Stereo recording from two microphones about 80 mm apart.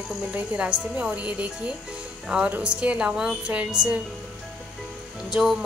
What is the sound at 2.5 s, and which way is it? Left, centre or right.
A woman's voice, centre.